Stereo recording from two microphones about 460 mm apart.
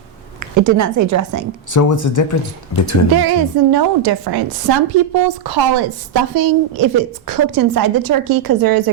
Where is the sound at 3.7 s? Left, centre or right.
Right.